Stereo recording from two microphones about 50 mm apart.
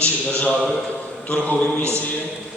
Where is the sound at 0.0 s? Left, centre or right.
Left.